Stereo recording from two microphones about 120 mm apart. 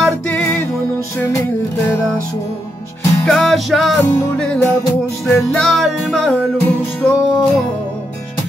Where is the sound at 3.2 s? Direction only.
Centre (ahead or behind).